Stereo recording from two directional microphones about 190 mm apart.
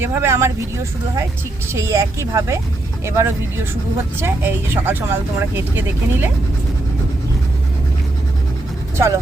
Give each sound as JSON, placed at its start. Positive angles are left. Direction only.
{"t": 0.0, "sound": "speech", "side_deg": -10}